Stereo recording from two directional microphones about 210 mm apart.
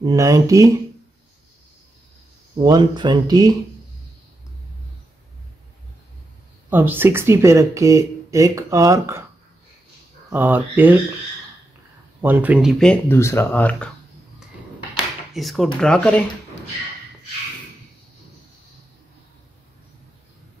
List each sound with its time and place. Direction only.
0.0 s speech: 15° right (ahead or behind)
2.6 s speech: 20° right (ahead or behind)
6.7 s speech: 10° right (ahead or behind)
10.3 s speech: 10° right (ahead or behind)
12.2 s speech: 10° right (ahead or behind); by 13.8 s 10° left (ahead or behind)
15.3 s speech: centre (ahead or behind)